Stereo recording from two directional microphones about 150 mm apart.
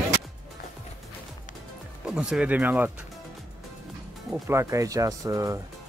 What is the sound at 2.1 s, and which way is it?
Speech, 5° right (ahead or behind).